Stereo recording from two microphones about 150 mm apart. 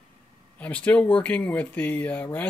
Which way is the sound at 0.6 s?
10° left (ahead or behind).